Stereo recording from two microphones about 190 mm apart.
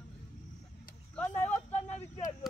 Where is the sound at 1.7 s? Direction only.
35° left (ahead or behind).